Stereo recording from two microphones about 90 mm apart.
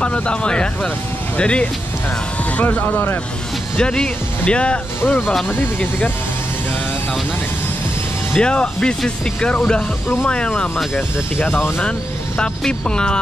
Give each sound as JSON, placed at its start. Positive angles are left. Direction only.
{"t": 0.0, "sound": "speech", "side_deg": 10}
{"t": 3.7, "sound": "speech", "side_deg": 10}
{"t": 8.4, "sound": "speech", "side_deg": 10}
{"t": 11.0, "sound": "speech", "side_deg": 20}
{"t": 12.4, "sound": "speech", "side_deg": 10}